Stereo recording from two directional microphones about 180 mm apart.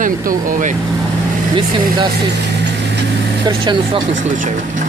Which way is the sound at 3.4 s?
25° right (ahead or behind).